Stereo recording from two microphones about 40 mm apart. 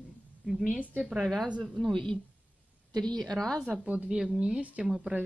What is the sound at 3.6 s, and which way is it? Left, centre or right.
Speech, right.